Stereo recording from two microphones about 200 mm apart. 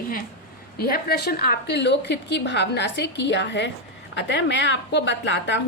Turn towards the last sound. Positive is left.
turn(degrees=65)  # may be behind; listen again after turning